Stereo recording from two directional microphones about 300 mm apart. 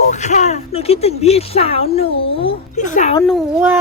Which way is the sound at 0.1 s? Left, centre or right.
Left.